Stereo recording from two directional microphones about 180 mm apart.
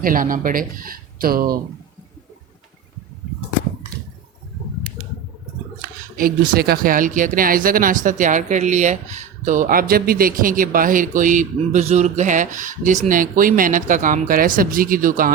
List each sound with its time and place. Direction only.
0.0 s speech: 50° right (ahead or behind)
5.8 s speech: 50° right (ahead or behind)